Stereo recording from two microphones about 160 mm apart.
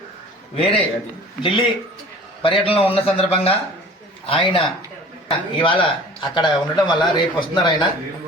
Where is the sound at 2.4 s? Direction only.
35° left (ahead or behind).